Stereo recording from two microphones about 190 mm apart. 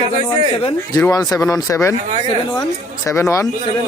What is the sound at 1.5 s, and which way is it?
Speech, 15° left (ahead or behind).